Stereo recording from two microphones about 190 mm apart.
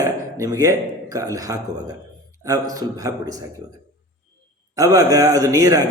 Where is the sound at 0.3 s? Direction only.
20° right (ahead or behind).